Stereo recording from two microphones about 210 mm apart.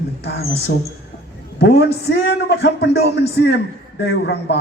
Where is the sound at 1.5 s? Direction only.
50° left (ahead or behind).